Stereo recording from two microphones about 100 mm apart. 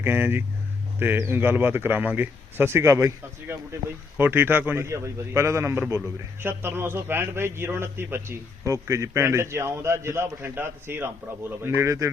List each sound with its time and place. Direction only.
0.0 s a man's voice: 20° right (ahead or behind)